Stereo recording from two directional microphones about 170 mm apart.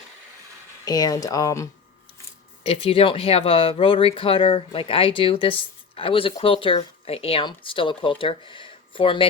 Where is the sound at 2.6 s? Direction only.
35° left (ahead or behind).